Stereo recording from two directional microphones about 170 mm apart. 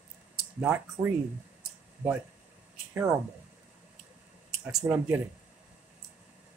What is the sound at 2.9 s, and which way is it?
Speech, 15° right (ahead or behind).